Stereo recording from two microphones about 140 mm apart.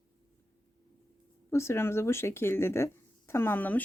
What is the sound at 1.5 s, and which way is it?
Speech, 20° left (ahead or behind).